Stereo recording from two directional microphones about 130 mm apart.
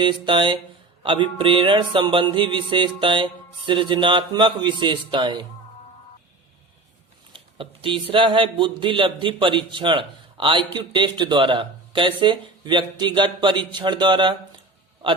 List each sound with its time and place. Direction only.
0.0 s speech: 40° right (ahead or behind)
7.3 s speech: 45° right (ahead or behind)